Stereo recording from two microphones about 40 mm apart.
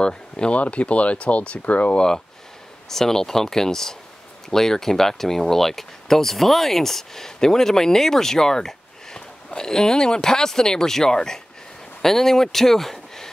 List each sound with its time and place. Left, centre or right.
0.0 s speech: left
0.6 s speech: left
2.0 s speech: centre